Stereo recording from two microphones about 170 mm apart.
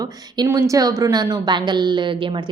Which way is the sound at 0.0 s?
20° right (ahead or behind).